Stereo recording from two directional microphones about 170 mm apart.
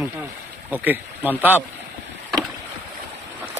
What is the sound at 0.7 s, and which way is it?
Speech, 10° right (ahead or behind).